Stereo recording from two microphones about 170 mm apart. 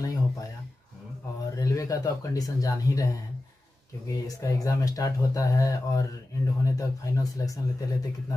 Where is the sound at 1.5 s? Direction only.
20° left (ahead or behind).